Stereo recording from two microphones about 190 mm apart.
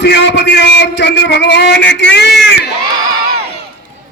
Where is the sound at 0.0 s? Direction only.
65° left (ahead or behind).